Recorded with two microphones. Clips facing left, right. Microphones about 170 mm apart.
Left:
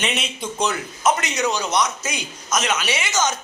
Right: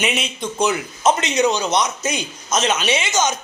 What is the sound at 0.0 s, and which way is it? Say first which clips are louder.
Speech: right 3 dB; 5° right (ahead or behind).